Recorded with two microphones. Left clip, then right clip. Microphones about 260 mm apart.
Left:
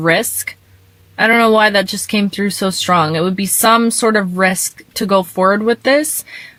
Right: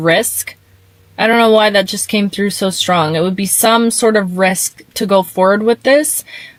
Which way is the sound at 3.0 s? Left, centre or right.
Right.